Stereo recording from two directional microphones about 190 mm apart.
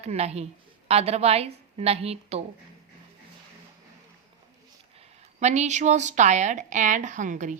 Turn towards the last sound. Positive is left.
turn(degrees=-40)  # may be behind; listen again after turning